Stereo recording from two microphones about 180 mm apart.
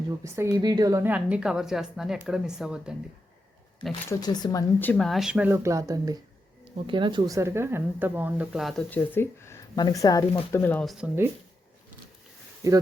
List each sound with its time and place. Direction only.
0.5 s a woman's voice: 20° right (ahead or behind); by 2.9 s 5° right (ahead or behind)
4.1 s speech: 20° left (ahead or behind)
4.8 s speech: 5° left (ahead or behind)
8.9 s speech: 10° left (ahead or behind)
10.6 s speech: 5° left (ahead or behind)
10.9 s speech: 10° right (ahead or behind)
12.6 s speech: 20° right (ahead or behind)